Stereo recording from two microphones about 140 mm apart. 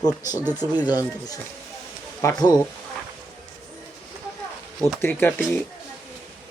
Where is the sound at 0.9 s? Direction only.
30° left (ahead or behind).